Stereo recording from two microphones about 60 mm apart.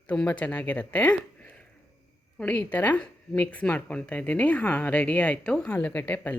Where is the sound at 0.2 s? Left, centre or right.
Centre.